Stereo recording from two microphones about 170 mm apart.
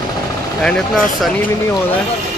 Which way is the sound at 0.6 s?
5° left (ahead or behind).